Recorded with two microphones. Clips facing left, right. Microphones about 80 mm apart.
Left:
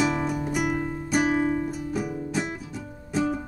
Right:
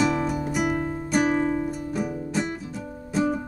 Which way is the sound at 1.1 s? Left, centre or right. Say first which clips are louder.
Right 1 dB; centre.